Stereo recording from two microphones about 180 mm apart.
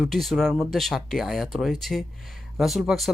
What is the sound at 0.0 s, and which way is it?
Speech, centre (ahead or behind).